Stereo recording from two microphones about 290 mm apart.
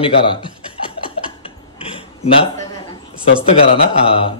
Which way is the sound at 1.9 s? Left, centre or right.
Centre.